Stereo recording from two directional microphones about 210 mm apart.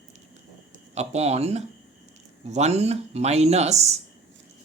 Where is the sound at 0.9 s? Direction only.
30° right (ahead or behind).